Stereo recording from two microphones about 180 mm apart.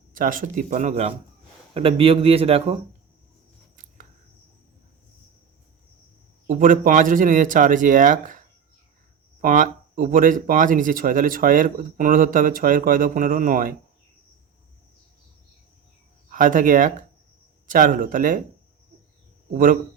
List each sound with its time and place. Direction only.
0.1 s a man's voice: 50° right (ahead or behind); by 2.7 s 35° right (ahead or behind)
6.5 s speech: 50° right (ahead or behind)
16.3 s speech: 45° right (ahead or behind)
19.5 s speech: 50° right (ahead or behind)